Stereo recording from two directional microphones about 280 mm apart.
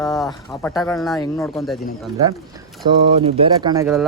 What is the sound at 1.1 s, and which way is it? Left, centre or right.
Speech, centre.